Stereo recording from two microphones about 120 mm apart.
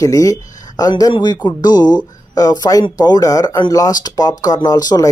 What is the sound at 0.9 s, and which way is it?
Speech, 40° left (ahead or behind).